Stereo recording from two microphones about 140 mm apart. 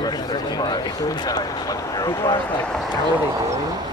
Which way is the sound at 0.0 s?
30° left (ahead or behind).